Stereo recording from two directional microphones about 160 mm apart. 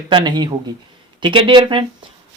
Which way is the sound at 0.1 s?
30° right (ahead or behind).